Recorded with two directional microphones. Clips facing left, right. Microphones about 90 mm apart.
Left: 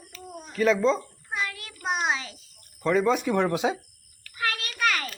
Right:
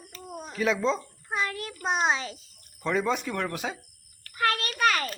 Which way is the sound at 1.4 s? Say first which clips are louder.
Right 1 dB; 35° right (ahead or behind).